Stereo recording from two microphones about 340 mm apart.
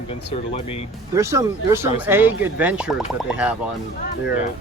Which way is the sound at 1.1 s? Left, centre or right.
Centre.